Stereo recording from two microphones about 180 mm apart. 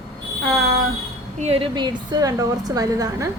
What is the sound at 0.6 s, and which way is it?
Speech, 65° right (ahead or behind).